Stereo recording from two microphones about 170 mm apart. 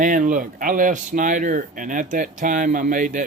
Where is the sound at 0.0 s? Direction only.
50° right (ahead or behind).